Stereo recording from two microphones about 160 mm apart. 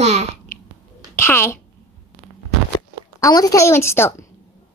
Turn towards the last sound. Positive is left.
turn(degrees=15)  # may be behind; listen again after turning